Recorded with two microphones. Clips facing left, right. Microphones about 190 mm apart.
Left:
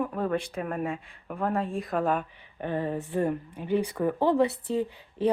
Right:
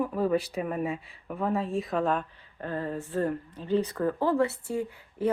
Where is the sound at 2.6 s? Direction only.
20° left (ahead or behind).